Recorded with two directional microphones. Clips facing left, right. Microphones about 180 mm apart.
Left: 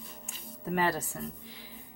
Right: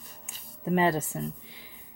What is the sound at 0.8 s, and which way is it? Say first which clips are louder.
Speech: right 5 dB; 20° right (ahead or behind).